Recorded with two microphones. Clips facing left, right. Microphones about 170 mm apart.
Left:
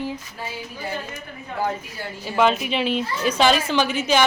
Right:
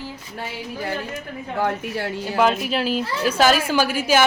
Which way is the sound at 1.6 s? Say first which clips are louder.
Right 3 dB; 70° right (ahead or behind).